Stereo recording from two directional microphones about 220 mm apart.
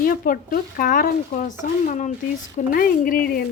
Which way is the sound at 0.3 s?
35° left (ahead or behind).